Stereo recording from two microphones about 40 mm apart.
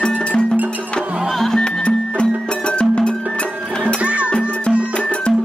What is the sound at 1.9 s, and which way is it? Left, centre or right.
Music, left.